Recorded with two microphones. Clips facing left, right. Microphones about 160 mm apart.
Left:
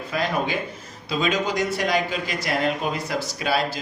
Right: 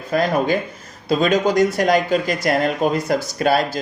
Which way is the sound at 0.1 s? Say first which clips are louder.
Right 7 dB; 45° right (ahead or behind).